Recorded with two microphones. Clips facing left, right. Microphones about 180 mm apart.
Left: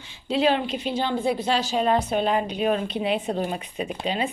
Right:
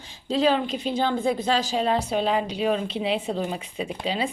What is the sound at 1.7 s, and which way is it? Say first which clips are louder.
A woman's voice: left 1 dB; 30° right (ahead or behind).